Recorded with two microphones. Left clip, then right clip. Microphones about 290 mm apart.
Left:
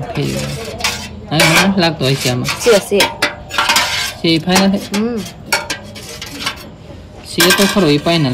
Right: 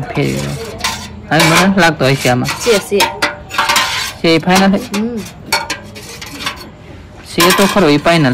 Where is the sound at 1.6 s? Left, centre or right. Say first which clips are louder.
Right 3 dB; centre.